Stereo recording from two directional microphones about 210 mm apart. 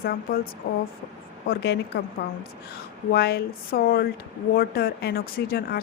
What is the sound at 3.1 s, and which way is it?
A woman's voice, 50° left (ahead or behind).